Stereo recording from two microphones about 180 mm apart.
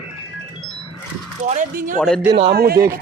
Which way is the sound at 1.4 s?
45° right (ahead or behind).